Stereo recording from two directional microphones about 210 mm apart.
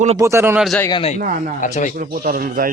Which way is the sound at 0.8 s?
20° left (ahead or behind).